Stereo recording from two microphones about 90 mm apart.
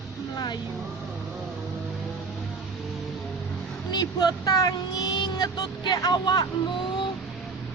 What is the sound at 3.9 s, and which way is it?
Speech, 50° left (ahead or behind).